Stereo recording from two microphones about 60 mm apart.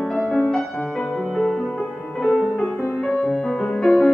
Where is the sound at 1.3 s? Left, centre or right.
Centre.